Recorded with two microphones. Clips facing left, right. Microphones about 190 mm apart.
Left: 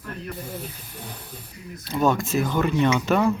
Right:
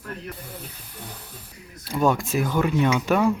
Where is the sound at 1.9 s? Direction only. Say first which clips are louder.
Even; 10° right (ahead or behind).